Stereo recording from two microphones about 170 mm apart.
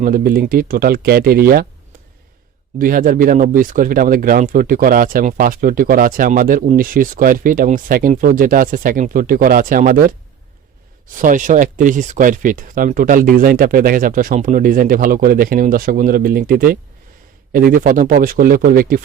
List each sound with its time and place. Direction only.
0.0 s speech: 55° right (ahead or behind)
2.7 s speech: 55° right (ahead or behind)
11.2 s speech: 50° right (ahead or behind)